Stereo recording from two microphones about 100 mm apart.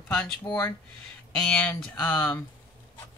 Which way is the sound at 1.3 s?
10° left (ahead or behind).